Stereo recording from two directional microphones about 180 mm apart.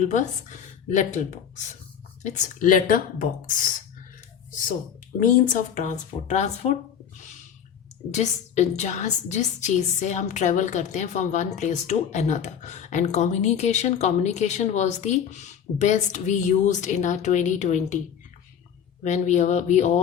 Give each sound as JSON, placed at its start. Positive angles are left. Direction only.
{"t": 0.0, "sound": "speech", "side_deg": 40}
{"t": 5.2, "sound": "a woman's voice", "side_deg": 45}
{"t": 8.1, "sound": "a woman's voice", "side_deg": 40}
{"t": 19.0, "sound": "a woman's voice", "side_deg": 40}